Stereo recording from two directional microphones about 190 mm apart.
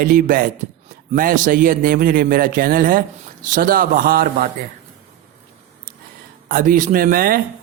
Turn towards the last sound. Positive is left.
turn(degrees=-50)  # may be behind; listen again after turning